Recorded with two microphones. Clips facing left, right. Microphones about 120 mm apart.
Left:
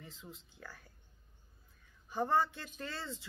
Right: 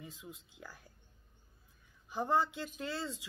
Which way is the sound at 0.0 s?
15° right (ahead or behind).